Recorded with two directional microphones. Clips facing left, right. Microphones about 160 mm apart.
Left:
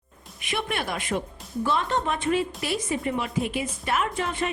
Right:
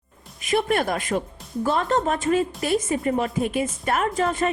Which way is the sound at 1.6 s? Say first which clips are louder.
Right 4 dB; 45° right (ahead or behind).